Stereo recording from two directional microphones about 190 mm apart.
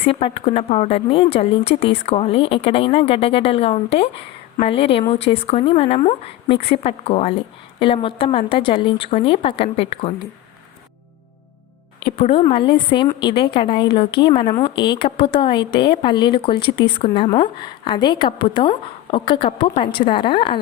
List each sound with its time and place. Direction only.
0.0 s a woman's voice: 30° left (ahead or behind)
11.9 s a woman's voice: 30° left (ahead or behind)